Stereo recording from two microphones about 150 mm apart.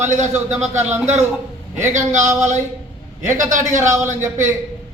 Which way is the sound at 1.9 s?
50° right (ahead or behind).